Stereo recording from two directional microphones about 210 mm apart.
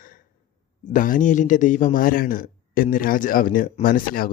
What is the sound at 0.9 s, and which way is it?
Speech, 40° left (ahead or behind).